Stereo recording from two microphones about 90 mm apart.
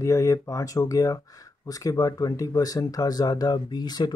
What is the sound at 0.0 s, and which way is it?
Speech, 35° left (ahead or behind).